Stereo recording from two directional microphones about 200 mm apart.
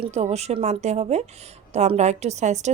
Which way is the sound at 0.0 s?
30° right (ahead or behind).